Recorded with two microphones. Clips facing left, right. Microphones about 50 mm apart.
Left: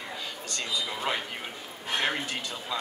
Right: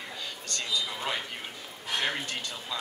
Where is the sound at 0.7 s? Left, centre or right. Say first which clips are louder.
Left 2 dB; centre.